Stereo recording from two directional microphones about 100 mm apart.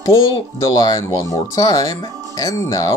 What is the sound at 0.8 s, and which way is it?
Speech, 35° left (ahead or behind).